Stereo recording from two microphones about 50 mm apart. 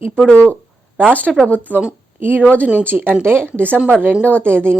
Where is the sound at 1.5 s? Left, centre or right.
Left.